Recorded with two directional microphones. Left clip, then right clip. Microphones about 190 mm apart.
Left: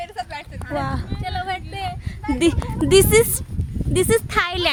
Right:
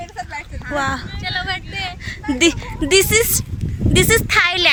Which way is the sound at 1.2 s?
45° left (ahead or behind).